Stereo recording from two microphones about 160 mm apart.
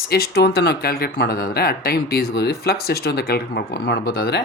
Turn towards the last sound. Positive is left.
turn(degrees=80)